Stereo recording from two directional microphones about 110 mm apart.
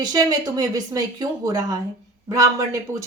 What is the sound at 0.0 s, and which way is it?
Speech, 35° right (ahead or behind).